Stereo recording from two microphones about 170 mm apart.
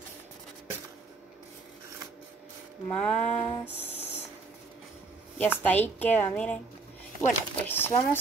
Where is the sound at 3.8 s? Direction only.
40° left (ahead or behind).